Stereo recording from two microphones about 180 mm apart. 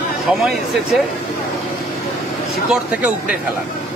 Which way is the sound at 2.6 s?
5° right (ahead or behind).